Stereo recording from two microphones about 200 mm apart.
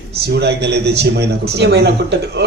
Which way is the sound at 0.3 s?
55° right (ahead or behind).